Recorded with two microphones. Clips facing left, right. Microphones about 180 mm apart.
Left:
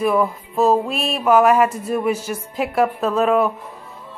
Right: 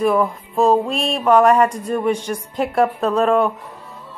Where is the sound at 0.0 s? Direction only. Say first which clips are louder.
Right 1 dB; centre (ahead or behind).